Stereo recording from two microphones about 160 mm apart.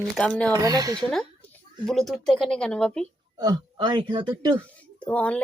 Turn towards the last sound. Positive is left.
turn(degrees=10)  # may be behind; listen again after turning